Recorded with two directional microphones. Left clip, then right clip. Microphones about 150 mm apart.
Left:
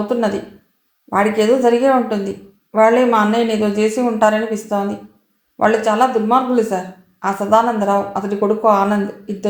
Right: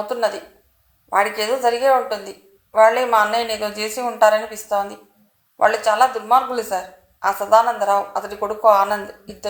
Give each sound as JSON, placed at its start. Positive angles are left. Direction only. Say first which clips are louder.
{"t": 0.1, "sound": "speech", "louder": "left 3 dB", "side_deg": -30}